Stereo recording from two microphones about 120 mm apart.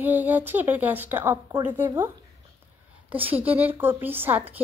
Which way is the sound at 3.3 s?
15° right (ahead or behind).